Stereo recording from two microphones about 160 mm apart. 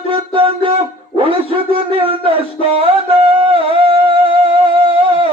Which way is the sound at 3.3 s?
35° right (ahead or behind).